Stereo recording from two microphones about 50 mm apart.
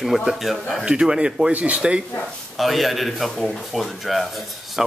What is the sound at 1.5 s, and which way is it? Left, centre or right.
Speech, right.